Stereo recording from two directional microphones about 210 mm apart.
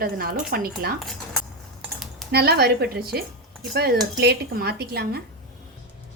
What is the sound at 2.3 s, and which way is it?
A woman's voice, 50° right (ahead or behind).